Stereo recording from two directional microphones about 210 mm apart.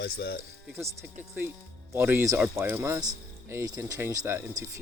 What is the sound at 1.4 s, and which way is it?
Speech, 10° right (ahead or behind).